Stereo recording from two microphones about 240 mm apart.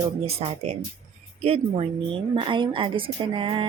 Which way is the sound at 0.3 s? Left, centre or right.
Right.